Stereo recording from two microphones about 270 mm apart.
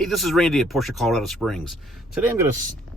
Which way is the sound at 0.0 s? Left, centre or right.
Centre.